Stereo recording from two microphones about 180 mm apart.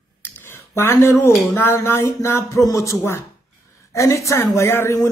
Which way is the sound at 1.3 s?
Centre (ahead or behind).